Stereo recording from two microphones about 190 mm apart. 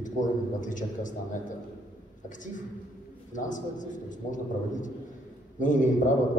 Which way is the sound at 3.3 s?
40° left (ahead or behind).